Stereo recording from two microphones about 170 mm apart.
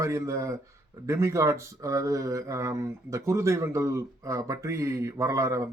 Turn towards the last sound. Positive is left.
turn(degrees=-20)  # may be behind; listen again after turning